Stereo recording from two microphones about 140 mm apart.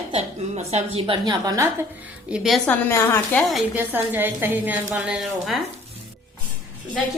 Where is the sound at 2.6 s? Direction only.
15° left (ahead or behind).